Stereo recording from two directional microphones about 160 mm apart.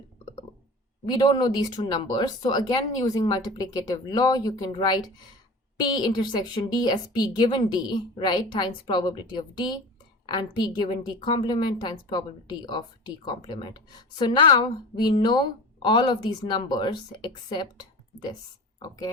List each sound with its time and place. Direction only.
1.0 s a woman's voice: 30° left (ahead or behind)